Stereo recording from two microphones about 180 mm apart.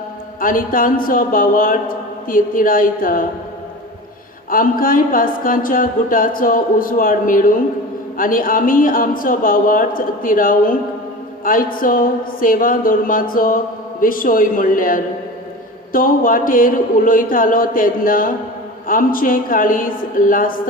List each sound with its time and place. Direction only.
0.3 s speech: 50° left (ahead or behind)
4.4 s speech: 50° left (ahead or behind)